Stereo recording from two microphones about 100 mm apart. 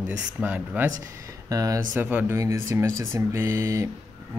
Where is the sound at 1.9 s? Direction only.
20° right (ahead or behind).